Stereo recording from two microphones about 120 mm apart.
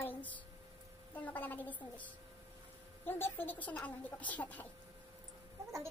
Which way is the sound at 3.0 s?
15° left (ahead or behind).